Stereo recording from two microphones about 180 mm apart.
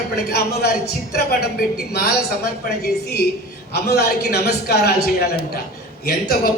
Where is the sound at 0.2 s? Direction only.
60° left (ahead or behind).